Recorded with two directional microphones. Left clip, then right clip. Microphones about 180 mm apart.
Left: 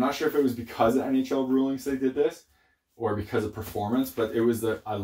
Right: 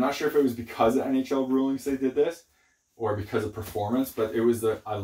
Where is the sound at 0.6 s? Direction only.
20° left (ahead or behind).